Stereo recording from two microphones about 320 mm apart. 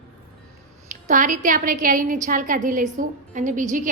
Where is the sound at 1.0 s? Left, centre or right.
Right.